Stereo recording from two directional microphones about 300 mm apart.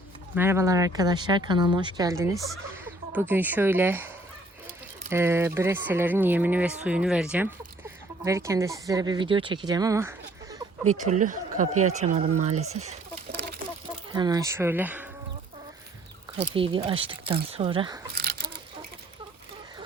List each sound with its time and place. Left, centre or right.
0.3 s speech: centre
10.8 s speech: right
14.1 s speech: centre
16.4 s speech: centre
18.1 s a sound: right